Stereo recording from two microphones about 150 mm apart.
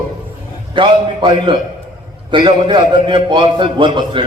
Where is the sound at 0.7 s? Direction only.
30° right (ahead or behind).